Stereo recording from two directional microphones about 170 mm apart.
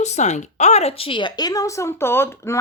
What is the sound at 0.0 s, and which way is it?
Speech, 40° left (ahead or behind).